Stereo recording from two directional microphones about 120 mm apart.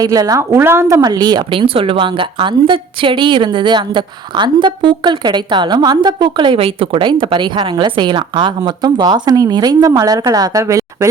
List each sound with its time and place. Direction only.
0.0 s a woman's voice: 30° right (ahead or behind)